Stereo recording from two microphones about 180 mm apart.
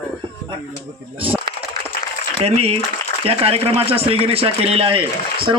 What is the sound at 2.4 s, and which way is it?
A man's voice, 35° right (ahead or behind).